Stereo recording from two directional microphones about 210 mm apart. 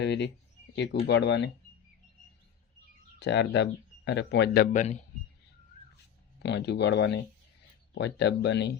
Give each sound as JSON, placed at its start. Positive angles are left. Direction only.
{"t": 0.0, "sound": "speech", "side_deg": 55}
{"t": 3.2, "sound": "speech", "side_deg": 55}
{"t": 6.4, "sound": "speech", "side_deg": 55}